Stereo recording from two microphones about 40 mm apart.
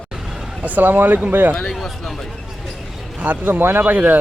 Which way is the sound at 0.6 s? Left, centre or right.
Right.